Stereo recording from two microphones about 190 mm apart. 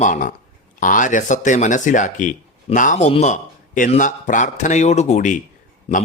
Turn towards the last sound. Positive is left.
turn(degrees=35)  # may be behind; listen again after turning